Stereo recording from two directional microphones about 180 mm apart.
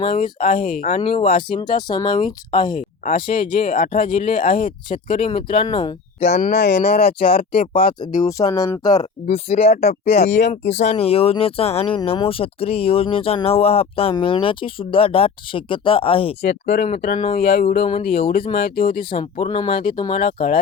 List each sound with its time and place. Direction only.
0.0 s speech: 30° left (ahead or behind)
6.5 s speech: 65° left (ahead or behind)
8.2 s speech: 20° left (ahead or behind)
9.0 s speech: 35° left (ahead or behind)
16.4 s speech: 65° left (ahead or behind)
17.0 s speech: 50° left (ahead or behind)
18.9 s speech: 30° left (ahead or behind)